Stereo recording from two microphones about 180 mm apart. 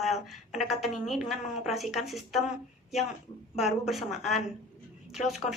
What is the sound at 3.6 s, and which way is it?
A woman's voice, centre (ahead or behind).